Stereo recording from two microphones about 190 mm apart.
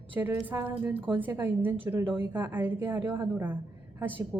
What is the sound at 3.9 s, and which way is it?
Speech, 10° right (ahead or behind).